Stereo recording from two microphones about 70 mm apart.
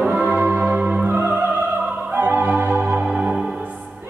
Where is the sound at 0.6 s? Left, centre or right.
Centre.